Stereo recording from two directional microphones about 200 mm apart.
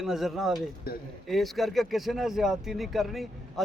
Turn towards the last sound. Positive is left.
turn(degrees=0)  # may be behind; listen again after turning